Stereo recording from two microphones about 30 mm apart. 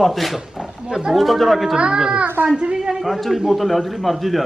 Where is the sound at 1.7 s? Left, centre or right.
Right.